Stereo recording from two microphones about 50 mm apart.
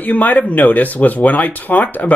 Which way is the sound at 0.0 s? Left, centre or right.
Left.